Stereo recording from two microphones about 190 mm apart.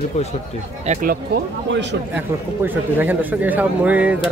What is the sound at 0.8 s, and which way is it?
Speech, 40° right (ahead or behind).